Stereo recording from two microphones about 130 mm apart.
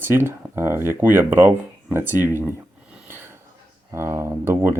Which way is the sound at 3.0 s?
20° right (ahead or behind).